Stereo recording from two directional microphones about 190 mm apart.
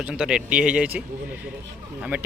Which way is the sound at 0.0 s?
5° right (ahead or behind).